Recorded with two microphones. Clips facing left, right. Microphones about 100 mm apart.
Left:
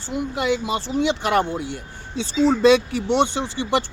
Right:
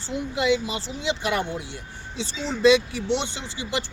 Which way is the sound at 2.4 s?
50° left (ahead or behind).